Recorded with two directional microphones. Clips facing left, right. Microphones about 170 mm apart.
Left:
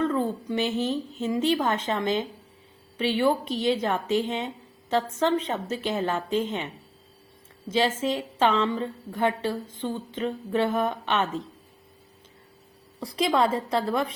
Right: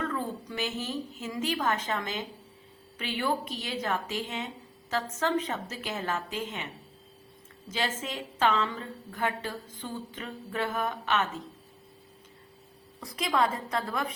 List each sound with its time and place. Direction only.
0.0 s a woman's voice: 30° left (ahead or behind)
7.7 s a woman's voice: 30° left (ahead or behind)
13.0 s a woman's voice: 30° left (ahead or behind)